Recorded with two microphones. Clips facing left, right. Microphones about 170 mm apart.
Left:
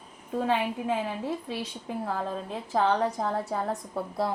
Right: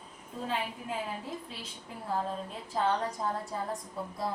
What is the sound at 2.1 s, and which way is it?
A woman's voice, 75° left (ahead or behind).